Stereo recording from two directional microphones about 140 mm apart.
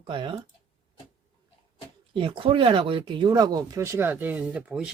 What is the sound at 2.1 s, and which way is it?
Speech, 35° right (ahead or behind).